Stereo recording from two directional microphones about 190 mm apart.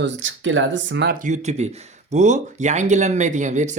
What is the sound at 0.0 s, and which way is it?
Speech, 75° right (ahead or behind).